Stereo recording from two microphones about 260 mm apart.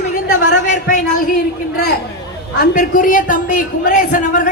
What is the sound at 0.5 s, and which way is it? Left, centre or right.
Speech, left.